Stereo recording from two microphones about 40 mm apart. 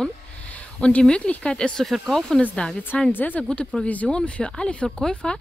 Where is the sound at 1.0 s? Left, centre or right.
Left.